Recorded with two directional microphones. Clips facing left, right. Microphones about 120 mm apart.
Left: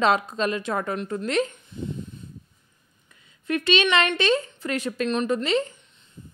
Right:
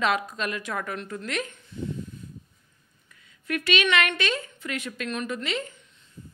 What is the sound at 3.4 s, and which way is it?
A woman's voice, 25° left (ahead or behind).